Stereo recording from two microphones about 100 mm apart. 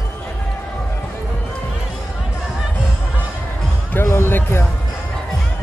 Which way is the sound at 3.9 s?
25° left (ahead or behind).